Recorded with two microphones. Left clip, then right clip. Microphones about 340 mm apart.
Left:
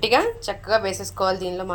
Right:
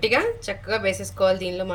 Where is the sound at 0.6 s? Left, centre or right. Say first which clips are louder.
Left 3 dB; centre.